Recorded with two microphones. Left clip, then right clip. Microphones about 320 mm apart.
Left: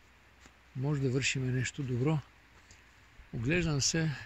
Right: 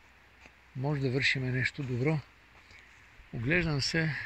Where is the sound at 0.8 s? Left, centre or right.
Centre.